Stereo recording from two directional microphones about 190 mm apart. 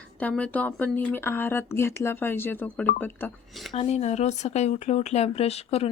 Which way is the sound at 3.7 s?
35° left (ahead or behind).